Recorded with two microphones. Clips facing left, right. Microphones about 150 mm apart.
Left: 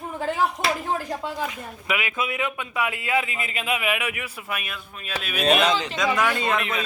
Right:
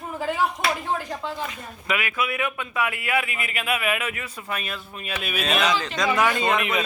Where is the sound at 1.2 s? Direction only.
10° left (ahead or behind).